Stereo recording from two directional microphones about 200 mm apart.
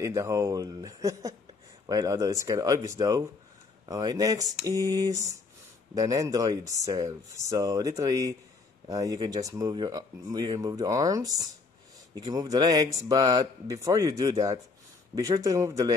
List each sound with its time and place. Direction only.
0.0 s speech: 15° right (ahead or behind)